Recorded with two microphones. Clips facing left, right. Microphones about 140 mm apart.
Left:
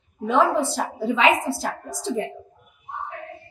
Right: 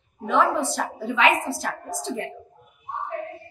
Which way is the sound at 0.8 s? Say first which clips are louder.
Left 1 dB; 20° left (ahead or behind).